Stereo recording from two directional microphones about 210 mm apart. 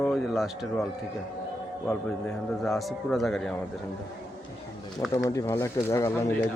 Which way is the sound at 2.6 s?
Centre (ahead or behind).